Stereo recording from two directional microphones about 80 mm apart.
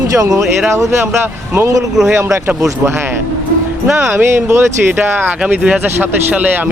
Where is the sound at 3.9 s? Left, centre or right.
Centre.